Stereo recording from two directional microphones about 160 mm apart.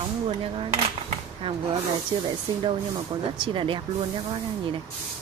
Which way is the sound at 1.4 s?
35° right (ahead or behind).